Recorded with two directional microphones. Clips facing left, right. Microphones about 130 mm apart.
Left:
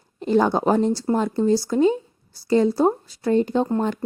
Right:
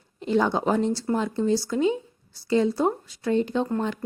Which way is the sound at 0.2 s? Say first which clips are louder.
Left 4 dB; 45° left (ahead or behind).